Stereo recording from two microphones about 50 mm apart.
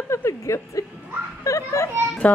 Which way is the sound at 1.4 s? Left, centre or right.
Left.